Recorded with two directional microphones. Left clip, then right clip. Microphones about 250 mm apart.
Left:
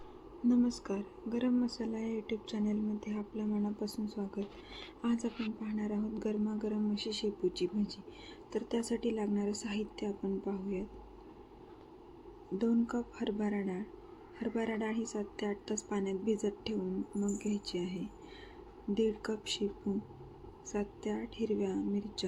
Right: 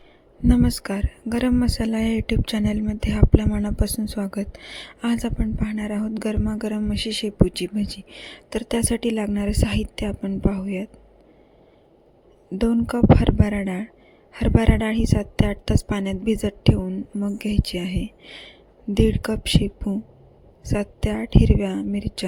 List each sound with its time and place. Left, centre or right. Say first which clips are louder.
0.4 s speech: right 11 dB; right
12.5 s speech: right 12 dB; right
20.7 s speech: right 12 dB; right